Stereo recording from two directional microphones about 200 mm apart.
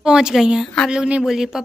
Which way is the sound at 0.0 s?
5° right (ahead or behind).